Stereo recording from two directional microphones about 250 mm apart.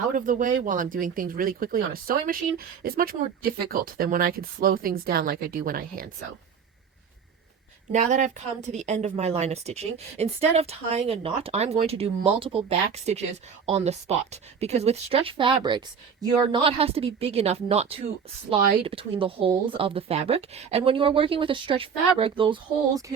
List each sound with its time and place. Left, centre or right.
0.2 s speech: right
7.9 s a woman's voice: right